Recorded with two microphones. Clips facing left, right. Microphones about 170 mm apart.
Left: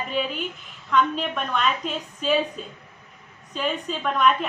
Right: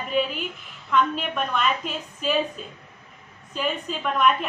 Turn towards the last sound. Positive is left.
turn(degrees=0)  # may be behind; listen again after turning